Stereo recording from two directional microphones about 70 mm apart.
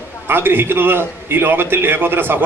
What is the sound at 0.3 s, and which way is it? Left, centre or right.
A man's voice, right.